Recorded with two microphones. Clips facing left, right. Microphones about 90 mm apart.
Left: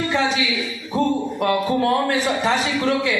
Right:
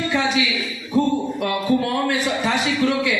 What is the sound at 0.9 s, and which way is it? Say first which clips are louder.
Music: right 1 dB; 35° left (ahead or behind).